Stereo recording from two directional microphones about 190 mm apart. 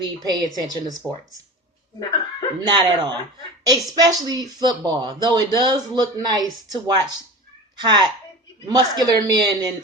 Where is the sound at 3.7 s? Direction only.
20° right (ahead or behind).